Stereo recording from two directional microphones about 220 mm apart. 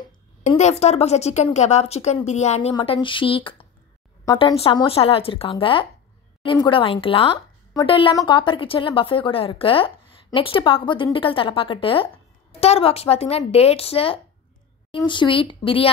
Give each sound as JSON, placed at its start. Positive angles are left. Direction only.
{"t": 0.5, "sound": "speech", "side_deg": 30}